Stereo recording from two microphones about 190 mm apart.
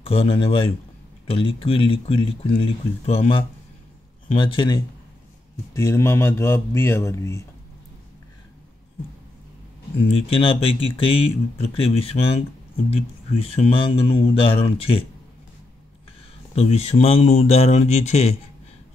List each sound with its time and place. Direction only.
0.0 s speech: 30° left (ahead or behind)
5.7 s a man's voice: 15° left (ahead or behind)
10.1 s speech: 30° left (ahead or behind)
16.5 s speech: 35° left (ahead or behind)